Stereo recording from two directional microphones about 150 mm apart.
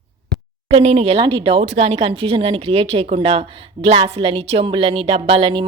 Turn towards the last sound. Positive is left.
turn(degrees=-35)  # may be behind; listen again after turning